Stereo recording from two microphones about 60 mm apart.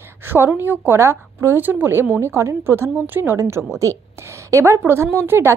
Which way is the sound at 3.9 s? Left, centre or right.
Left.